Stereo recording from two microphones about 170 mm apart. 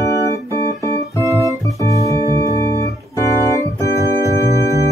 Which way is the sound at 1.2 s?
20° right (ahead or behind).